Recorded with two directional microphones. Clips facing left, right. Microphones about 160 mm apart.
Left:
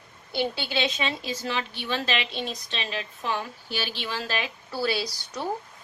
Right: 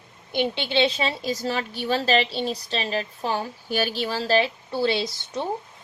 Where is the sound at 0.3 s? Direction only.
20° right (ahead or behind).